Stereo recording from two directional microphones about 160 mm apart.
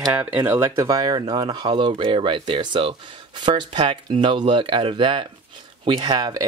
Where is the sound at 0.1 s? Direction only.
10° right (ahead or behind).